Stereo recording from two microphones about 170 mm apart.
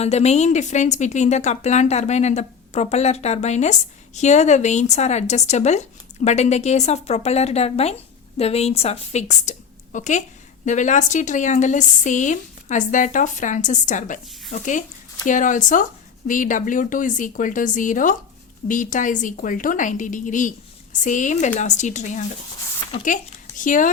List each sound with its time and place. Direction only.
0.0 s speech: 40° left (ahead or behind)